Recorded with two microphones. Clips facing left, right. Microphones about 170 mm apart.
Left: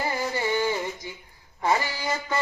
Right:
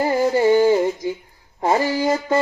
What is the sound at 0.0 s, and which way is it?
Music, 45° right (ahead or behind).